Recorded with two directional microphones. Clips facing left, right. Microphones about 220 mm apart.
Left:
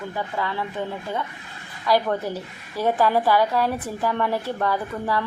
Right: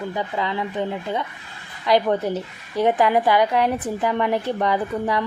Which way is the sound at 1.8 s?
20° right (ahead or behind).